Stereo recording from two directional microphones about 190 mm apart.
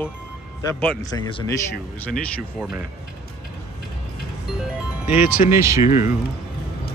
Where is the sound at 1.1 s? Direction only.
20° left (ahead or behind).